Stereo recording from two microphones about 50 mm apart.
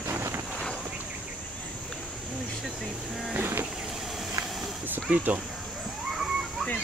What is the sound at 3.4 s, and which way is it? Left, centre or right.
Vehicle, right.